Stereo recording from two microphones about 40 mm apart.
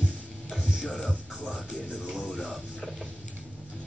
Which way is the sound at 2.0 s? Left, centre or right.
Right.